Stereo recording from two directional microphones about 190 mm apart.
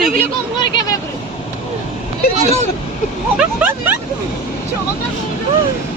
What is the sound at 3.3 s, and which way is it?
Speech, 10° right (ahead or behind).